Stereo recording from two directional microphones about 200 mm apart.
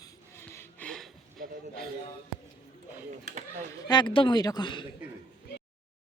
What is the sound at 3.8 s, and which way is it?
Speech, 20° left (ahead or behind).